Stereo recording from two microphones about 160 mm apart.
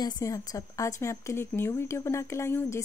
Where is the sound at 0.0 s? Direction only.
20° left (ahead or behind).